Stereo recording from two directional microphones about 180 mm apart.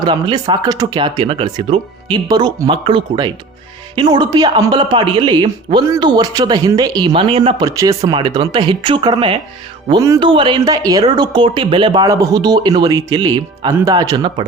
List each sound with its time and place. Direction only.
0.0 s speech: 25° right (ahead or behind)
7.8 s speech: 20° right (ahead or behind)